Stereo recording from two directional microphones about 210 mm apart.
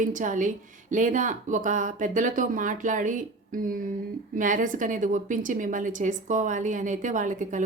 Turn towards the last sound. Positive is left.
turn(degrees=-35)  # may be behind; listen again after turning